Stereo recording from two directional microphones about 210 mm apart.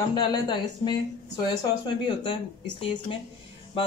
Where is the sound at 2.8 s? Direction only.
25° left (ahead or behind).